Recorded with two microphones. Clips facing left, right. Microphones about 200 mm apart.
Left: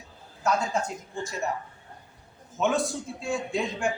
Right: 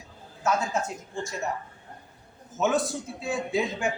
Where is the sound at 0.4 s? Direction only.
5° right (ahead or behind).